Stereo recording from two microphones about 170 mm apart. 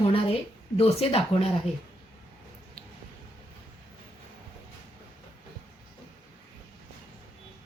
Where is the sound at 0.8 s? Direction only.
35° left (ahead or behind).